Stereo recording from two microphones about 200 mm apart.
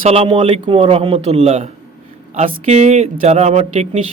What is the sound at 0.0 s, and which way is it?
A man's voice, 30° right (ahead or behind).